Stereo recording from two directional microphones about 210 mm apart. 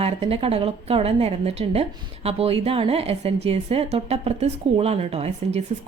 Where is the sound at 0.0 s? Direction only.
25° right (ahead or behind).